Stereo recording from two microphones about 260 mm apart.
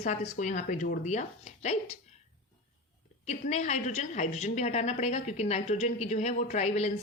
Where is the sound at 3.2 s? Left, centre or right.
Left.